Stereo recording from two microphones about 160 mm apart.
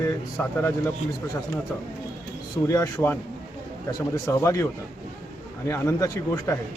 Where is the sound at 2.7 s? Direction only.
20° left (ahead or behind).